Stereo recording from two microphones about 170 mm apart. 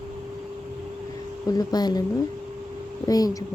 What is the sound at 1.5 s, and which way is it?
Speech, 25° left (ahead or behind).